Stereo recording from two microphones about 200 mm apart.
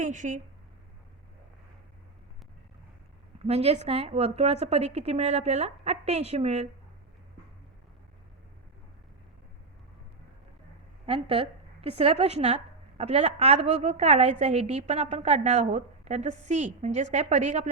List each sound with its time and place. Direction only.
0.0 s a woman's voice: 40° right (ahead or behind)
3.3 s a woman's voice: 30° right (ahead or behind)
11.0 s a woman's voice: 30° right (ahead or behind)